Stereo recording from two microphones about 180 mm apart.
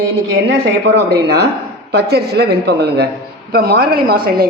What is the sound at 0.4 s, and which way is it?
A man's voice, 70° right (ahead or behind).